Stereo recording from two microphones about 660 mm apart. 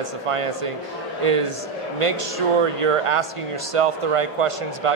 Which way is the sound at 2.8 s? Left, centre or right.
Right.